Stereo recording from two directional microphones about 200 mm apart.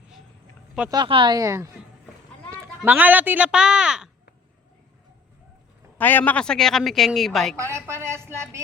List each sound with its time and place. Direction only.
0.9 s speech: 25° right (ahead or behind); by 4.1 s 5° right (ahead or behind)
6.0 s a woman's voice: 10° left (ahead or behind)
7.9 s speech: 15° right (ahead or behind)